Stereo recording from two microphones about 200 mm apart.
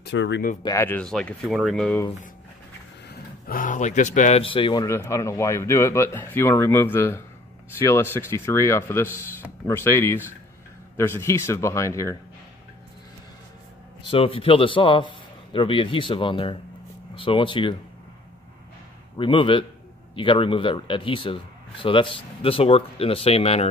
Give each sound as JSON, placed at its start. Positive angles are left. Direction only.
{"t": 0.0, "sound": "speech", "side_deg": 65}
{"t": 0.7, "sound": "speech", "side_deg": 10}
{"t": 3.1, "sound": "speech", "side_deg": 45}
{"t": 4.8, "sound": "speech", "side_deg": 15}
{"t": 14.0, "sound": "a man's voice", "side_deg": 25}
{"t": 19.1, "sound": "a man's voice", "side_deg": 25}